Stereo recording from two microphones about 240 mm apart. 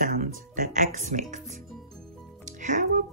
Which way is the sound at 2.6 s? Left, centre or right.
Right.